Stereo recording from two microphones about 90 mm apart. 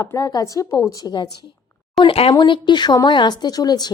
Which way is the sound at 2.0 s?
90° left.